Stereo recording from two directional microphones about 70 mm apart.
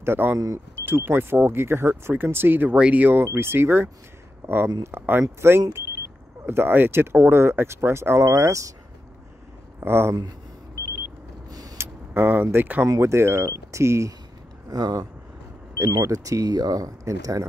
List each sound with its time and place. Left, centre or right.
0.0 s speech: right
9.8 s speech: right
11.8 s speech: right
12.8 s speech: right
14.7 s speech: right
16.0 s speech: right